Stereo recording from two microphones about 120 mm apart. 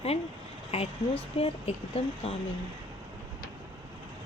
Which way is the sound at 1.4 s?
55° left (ahead or behind).